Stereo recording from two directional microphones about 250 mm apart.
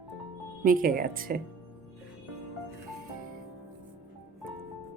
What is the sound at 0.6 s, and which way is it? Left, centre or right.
Speech, right.